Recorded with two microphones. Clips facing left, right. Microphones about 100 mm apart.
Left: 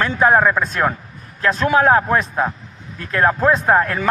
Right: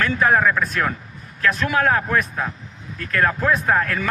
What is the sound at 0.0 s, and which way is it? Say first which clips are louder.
Speech: left 3 dB; 25° left (ahead or behind).